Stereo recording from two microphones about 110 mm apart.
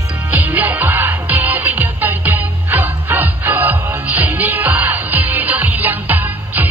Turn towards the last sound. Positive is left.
turn(degrees=-15)  # may be behind; listen again after turning